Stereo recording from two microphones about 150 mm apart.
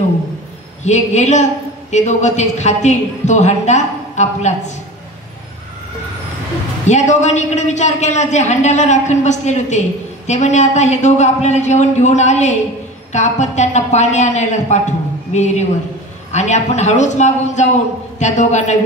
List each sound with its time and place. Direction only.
0.8 s a man's voice: 50° left (ahead or behind)
6.9 s a man's voice: 50° left (ahead or behind)